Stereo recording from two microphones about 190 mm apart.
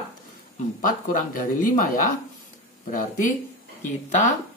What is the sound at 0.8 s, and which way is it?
Speech, 45° left (ahead or behind).